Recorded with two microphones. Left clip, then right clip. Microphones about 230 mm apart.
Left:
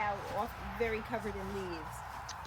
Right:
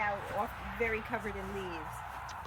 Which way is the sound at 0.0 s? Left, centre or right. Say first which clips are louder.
Right 1 dB; centre.